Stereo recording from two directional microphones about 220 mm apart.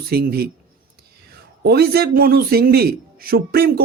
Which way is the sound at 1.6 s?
45° right (ahead or behind).